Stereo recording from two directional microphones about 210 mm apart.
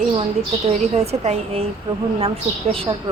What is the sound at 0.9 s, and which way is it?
Speech, 30° right (ahead or behind).